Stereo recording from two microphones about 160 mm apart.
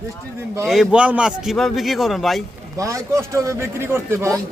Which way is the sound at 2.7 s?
20° right (ahead or behind).